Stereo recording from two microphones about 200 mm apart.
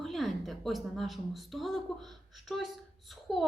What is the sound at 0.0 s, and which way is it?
A woman's voice, centre (ahead or behind).